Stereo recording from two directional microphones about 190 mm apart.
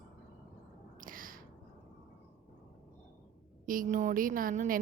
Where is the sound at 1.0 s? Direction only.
45° right (ahead or behind).